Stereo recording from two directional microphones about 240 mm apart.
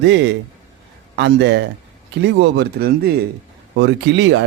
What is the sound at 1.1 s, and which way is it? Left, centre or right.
Speech, right.